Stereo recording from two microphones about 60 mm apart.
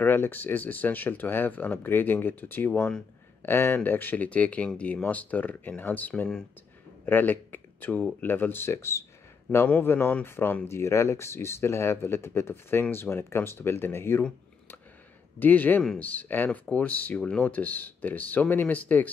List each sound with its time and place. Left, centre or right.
0.0 s speech: left
9.8 s speech: left
10.7 s speech: left
15.3 s speech: left